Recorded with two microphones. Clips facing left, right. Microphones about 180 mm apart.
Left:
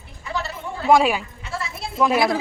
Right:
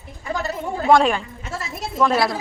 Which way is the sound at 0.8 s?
5° left (ahead or behind).